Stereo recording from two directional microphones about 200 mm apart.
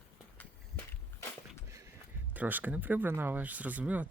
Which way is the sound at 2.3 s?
10° right (ahead or behind).